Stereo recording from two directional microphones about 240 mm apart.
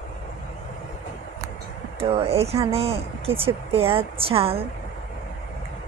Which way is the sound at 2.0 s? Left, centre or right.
Right.